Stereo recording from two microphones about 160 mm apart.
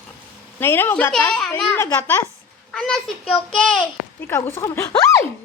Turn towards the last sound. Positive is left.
turn(degrees=20)  # may be behind; listen again after turning